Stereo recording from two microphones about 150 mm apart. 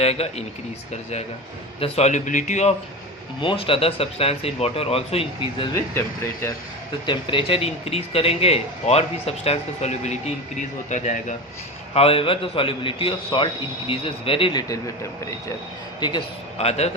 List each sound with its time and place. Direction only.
0.0 s a man's voice: 45° left (ahead or behind)
1.8 s a man's voice: 45° left (ahead or behind)
3.4 s speech: 35° left (ahead or behind)
7.0 s a man's voice: 35° left (ahead or behind); by 11.3 s 55° left (ahead or behind)
11.9 s speech: 40° left (ahead or behind)
16.0 s speech: 30° left (ahead or behind)
16.6 s a man's voice: 45° left (ahead or behind)